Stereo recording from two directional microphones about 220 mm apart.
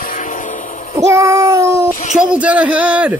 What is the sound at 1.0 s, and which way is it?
Child singing, 15° right (ahead or behind).